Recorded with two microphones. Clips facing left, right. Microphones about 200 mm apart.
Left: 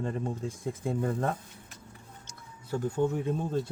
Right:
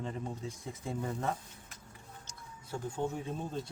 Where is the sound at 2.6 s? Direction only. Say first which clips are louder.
Left 7 dB; 65° left (ahead or behind).